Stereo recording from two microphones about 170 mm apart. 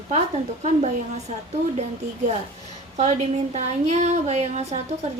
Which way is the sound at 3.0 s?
40° right (ahead or behind).